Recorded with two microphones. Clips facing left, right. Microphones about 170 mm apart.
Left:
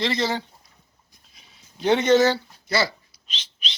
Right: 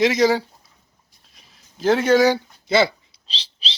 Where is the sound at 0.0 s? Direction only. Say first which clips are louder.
Right 8 dB; 15° right (ahead or behind).